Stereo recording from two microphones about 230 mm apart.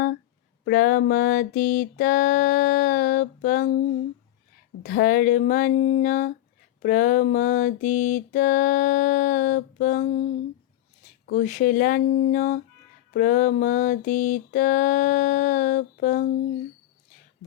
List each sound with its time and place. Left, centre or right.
0.6 s mantra: left
4.8 s mantra: left
11.3 s mantra: left